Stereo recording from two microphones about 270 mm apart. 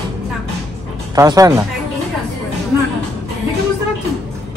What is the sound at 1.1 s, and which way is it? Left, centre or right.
Speech, centre.